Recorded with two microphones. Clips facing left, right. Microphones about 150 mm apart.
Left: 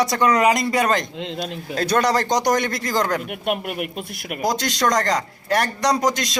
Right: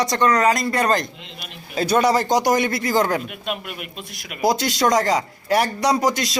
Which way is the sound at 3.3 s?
55° left (ahead or behind).